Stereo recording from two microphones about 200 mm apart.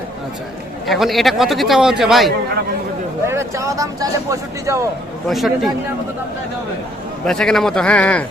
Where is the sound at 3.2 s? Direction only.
15° right (ahead or behind).